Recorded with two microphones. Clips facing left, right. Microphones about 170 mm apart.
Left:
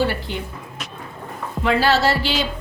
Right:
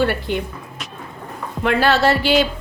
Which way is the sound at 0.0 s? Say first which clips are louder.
Right 3 dB; 55° right (ahead or behind).